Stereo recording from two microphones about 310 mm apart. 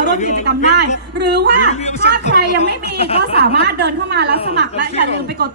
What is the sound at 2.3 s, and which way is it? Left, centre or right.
A woman's voice, right.